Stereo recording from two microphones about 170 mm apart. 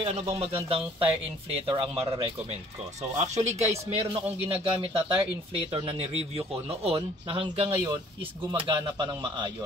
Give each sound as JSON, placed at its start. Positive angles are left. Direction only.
{"t": 0.0, "sound": "speech", "side_deg": -35}